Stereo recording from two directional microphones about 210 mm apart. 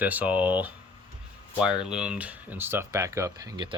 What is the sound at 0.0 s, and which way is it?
Speech, 5° right (ahead or behind).